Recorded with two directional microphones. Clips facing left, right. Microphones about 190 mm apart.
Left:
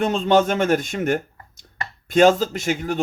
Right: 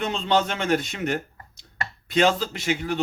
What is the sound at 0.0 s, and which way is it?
Speech, 45° left (ahead or behind).